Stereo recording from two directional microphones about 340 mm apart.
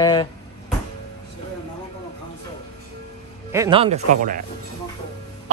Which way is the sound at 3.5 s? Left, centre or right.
Centre.